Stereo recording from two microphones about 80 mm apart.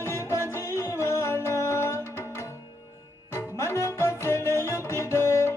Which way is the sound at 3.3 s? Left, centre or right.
Left.